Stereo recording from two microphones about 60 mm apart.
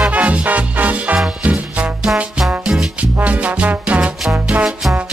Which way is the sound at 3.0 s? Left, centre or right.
Right.